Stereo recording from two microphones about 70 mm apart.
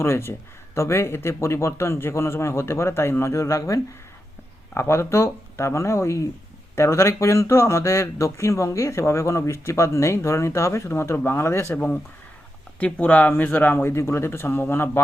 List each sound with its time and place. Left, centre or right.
0.0 s speech: left
12.8 s speech: left